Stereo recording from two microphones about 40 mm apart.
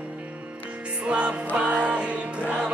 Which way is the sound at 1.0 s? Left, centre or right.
Right.